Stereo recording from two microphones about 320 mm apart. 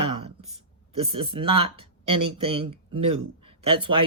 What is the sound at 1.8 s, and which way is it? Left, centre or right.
Speech, right.